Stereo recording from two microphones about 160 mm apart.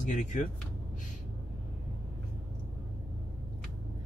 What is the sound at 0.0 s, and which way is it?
Speech, 55° left (ahead or behind).